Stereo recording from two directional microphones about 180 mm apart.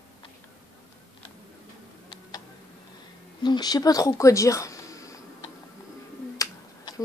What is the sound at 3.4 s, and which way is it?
Speech, 20° left (ahead or behind).